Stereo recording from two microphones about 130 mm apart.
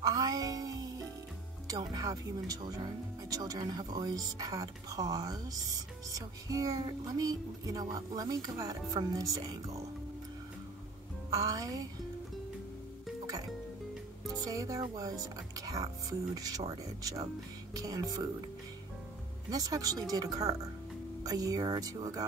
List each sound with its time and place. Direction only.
0.0 s music: 30° right (ahead or behind)
1.7 s speech: 30° right (ahead or behind)
11.2 s speech: 25° right (ahead or behind)
14.2 s speech: 25° right (ahead or behind)
19.5 s speech: 30° right (ahead or behind)